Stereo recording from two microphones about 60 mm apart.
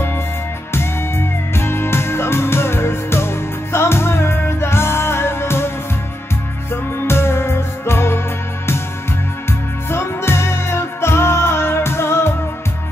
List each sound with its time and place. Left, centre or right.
0.7 s music: left
6.7 s music: left
9.5 s music: left